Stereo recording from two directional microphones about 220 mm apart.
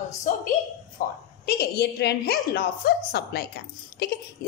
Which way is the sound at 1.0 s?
40° left (ahead or behind).